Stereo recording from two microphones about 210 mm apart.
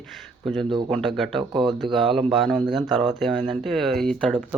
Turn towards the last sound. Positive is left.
turn(degrees=0)  # may be behind; listen again after turning